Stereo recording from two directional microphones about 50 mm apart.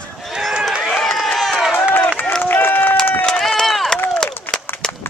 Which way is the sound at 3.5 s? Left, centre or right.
Centre.